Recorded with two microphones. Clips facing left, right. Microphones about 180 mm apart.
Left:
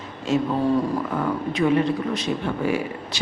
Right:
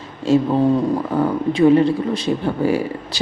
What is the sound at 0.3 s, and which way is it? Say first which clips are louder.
Speech: right 6 dB; 30° right (ahead or behind).